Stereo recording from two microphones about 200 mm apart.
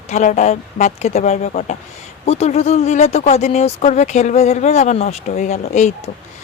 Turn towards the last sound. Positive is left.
turn(degrees=35)  # may be behind; listen again after turning